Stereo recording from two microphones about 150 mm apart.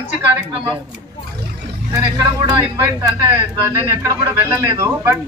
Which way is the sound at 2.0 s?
25° right (ahead or behind).